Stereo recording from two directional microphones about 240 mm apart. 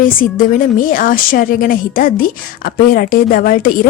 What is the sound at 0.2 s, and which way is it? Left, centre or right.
A woman's voice, left.